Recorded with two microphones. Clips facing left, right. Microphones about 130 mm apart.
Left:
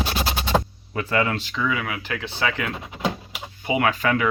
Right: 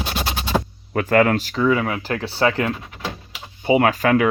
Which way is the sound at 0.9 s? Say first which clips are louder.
Right 7 dB; 55° right (ahead or behind).